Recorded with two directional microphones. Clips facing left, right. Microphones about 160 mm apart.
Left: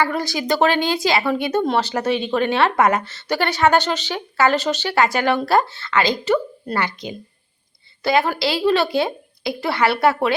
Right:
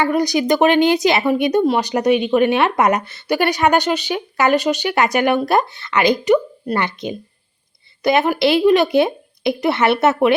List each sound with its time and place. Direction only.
0.0 s a woman's voice: 15° right (ahead or behind)